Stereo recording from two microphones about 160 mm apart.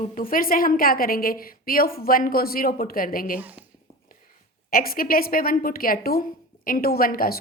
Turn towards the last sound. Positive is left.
turn(degrees=65)  # may be behind; listen again after turning